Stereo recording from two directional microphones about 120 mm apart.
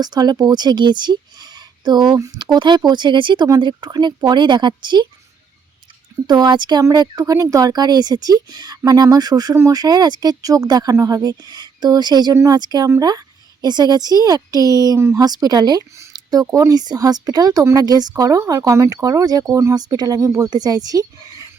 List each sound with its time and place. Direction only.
0.0 s speech: 35° right (ahead or behind)
6.2 s speech: 35° right (ahead or behind)